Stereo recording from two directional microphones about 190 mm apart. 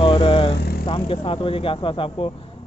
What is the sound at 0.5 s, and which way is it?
Vehicle, 60° left (ahead or behind).